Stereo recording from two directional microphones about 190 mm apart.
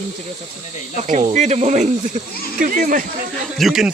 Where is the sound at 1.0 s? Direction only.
40° right (ahead or behind).